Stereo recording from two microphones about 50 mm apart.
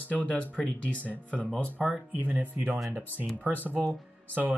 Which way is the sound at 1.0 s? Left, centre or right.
Right.